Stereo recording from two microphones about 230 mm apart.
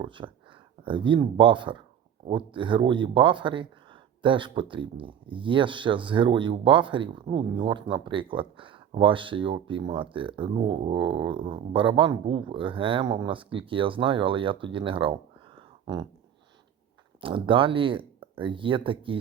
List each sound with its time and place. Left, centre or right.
0.0 s speech: right
17.2 s speech: right